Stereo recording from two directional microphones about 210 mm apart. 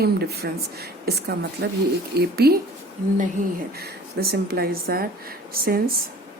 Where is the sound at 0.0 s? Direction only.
50° right (ahead or behind).